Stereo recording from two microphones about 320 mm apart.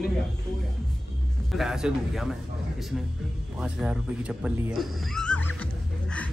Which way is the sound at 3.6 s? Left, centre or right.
Centre.